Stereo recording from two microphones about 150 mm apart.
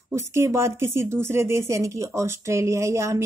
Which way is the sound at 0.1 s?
20° right (ahead or behind).